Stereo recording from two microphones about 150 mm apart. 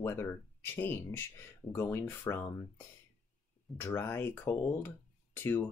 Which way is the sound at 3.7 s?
15° left (ahead or behind).